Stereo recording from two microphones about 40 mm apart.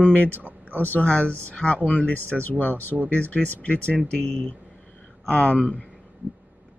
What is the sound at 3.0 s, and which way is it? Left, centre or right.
Speech, left.